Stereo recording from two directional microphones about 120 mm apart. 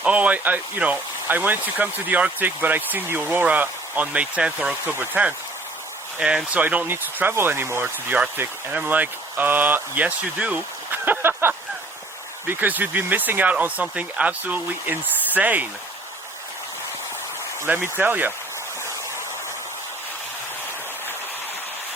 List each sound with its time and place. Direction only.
0.0 s speech: 10° right (ahead or behind)
17.7 s speech: 15° right (ahead or behind)